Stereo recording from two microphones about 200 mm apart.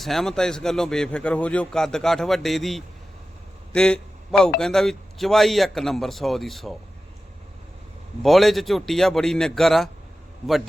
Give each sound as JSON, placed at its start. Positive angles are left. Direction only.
{"t": 0.0, "sound": "a man's voice", "side_deg": 0}
{"t": 8.2, "sound": "a man's voice", "side_deg": 0}